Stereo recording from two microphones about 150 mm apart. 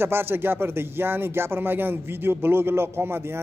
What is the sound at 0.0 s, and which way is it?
A man's voice, 15° right (ahead or behind).